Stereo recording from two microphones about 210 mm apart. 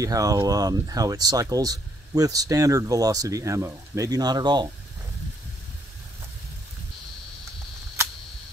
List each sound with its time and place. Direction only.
0.0 s speech: 15° right (ahead or behind)